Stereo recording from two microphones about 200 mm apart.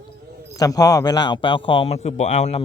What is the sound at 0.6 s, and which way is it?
A man's voice, 15° left (ahead or behind).